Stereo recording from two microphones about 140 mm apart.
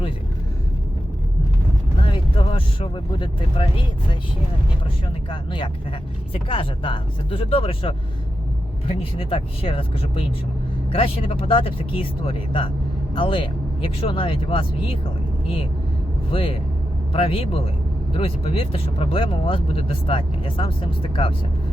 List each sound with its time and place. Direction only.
2.0 s vehicle: 35° left (ahead or behind)
5.3 s speech: 35° left (ahead or behind)